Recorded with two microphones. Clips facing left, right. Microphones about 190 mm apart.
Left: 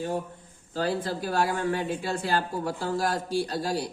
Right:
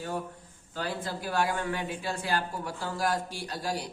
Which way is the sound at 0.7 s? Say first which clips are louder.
Left 6 dB; 35° left (ahead or behind).